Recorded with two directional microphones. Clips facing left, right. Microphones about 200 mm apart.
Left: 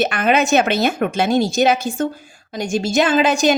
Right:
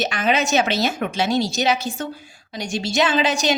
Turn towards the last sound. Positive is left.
turn(degrees=50)  # may be behind; listen again after turning